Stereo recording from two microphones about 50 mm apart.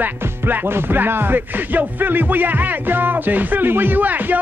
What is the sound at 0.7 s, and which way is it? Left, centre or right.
Music, right.